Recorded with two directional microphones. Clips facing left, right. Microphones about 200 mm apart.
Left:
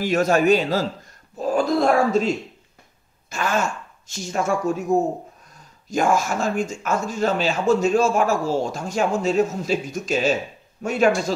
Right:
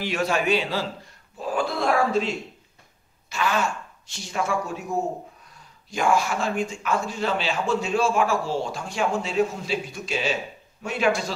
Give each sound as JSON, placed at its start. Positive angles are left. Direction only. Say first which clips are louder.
{"t": 0.0, "sound": "speech", "louder": "left 6 dB", "side_deg": 45}
{"t": 5.9, "sound": "speech", "louder": "left 2 dB", "side_deg": 45}